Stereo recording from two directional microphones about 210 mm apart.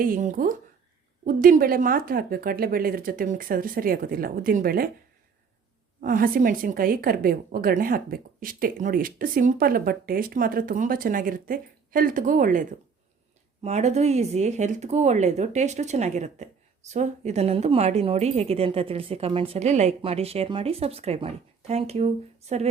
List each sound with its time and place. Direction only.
0.0 s speech: 40° right (ahead or behind)
6.0 s speech: 40° right (ahead or behind)